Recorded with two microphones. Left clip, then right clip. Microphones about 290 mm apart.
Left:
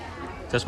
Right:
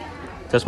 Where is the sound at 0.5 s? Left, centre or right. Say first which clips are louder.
Right 7 dB; centre.